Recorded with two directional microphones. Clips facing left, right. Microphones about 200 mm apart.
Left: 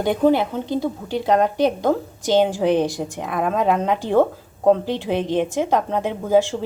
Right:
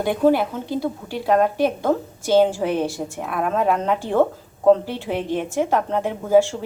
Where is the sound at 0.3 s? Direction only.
20° left (ahead or behind).